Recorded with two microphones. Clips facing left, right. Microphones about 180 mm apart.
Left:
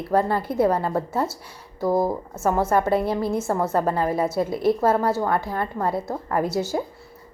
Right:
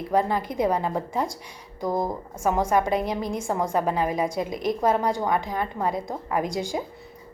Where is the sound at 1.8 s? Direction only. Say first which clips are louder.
Left 5 dB; 5° left (ahead or behind).